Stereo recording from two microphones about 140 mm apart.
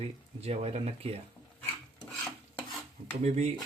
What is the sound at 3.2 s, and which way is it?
Speech, 55° right (ahead or behind).